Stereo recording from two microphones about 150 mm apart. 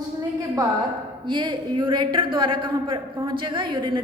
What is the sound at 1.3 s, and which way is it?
A woman's voice, 30° right (ahead or behind).